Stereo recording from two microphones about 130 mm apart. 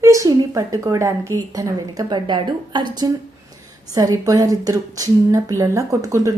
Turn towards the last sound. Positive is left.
turn(degrees=-25)  # may be behind; listen again after turning